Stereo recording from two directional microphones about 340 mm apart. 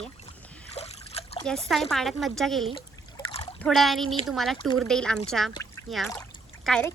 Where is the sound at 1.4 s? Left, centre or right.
Centre.